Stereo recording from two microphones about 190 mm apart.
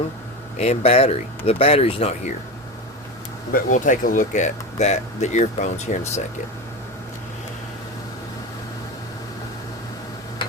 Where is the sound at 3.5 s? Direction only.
45° left (ahead or behind).